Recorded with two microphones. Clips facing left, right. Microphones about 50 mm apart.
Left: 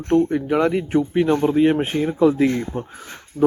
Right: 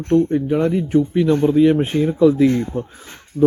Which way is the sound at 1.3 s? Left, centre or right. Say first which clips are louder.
Right 4 dB; left.